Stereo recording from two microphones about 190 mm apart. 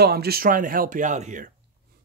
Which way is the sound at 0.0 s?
55° right (ahead or behind).